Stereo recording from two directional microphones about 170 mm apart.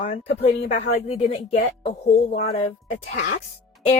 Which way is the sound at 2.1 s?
45° left (ahead or behind).